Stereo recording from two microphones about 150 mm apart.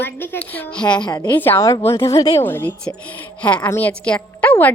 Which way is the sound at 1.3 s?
15° left (ahead or behind).